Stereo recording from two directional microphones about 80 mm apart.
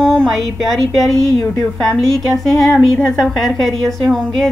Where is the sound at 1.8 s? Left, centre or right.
Centre.